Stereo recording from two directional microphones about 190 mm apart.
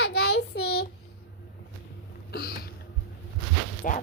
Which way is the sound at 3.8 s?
45° left (ahead or behind).